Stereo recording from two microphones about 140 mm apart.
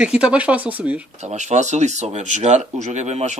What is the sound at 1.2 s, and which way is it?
Speech, 55° right (ahead or behind).